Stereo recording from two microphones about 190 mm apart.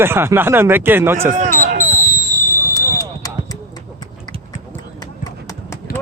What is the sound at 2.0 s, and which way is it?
Fireworks, 45° left (ahead or behind).